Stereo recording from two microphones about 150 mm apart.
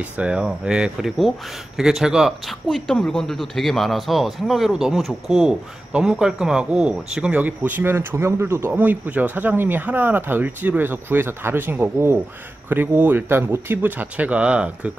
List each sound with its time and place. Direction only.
0.0 s speech: 10° right (ahead or behind)